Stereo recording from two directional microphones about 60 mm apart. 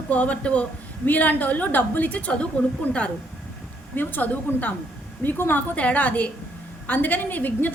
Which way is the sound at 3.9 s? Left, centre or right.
Left.